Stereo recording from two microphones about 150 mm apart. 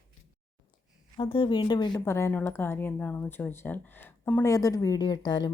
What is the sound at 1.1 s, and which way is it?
Speech, 35° left (ahead or behind).